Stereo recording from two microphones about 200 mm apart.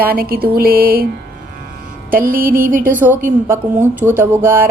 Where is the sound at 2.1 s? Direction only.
45° right (ahead or behind).